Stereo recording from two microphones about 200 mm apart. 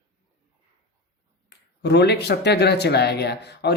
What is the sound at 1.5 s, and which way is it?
Speech, 55° left (ahead or behind).